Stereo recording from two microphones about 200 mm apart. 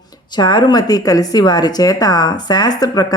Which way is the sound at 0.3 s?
20° left (ahead or behind).